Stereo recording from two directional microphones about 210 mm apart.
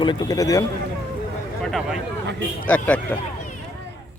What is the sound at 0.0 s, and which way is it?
Speech, 20° left (ahead or behind).